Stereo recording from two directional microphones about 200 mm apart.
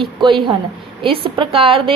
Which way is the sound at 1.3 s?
25° right (ahead or behind).